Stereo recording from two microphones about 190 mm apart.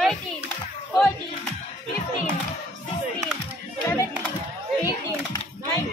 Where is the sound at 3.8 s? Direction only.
10° left (ahead or behind).